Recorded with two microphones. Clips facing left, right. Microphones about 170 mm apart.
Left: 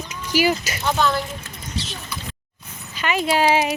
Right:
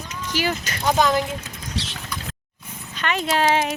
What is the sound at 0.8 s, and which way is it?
Speech, 15° right (ahead or behind).